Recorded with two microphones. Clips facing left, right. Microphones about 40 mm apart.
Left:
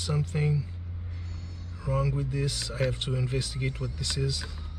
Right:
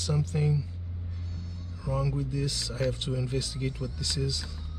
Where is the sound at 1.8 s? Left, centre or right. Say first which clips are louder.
Left 1 dB; centre.